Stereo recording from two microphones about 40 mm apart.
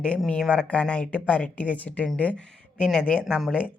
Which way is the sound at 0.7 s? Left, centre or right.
Left.